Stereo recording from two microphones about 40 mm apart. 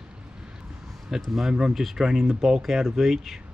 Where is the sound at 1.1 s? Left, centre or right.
Centre.